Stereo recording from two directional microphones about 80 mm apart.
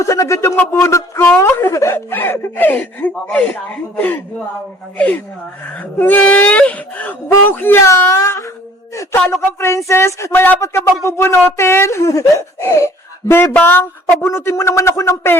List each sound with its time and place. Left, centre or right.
0.0 s speech: left
2.1 s speech: left
7.9 s speech: left
10.3 s speech: left
14.3 s speech: left